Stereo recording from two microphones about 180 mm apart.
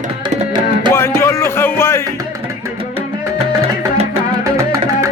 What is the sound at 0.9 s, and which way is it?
Music, 15° left (ahead or behind).